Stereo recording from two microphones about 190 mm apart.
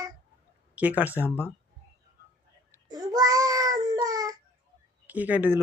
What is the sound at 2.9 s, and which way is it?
Child singing, 20° right (ahead or behind).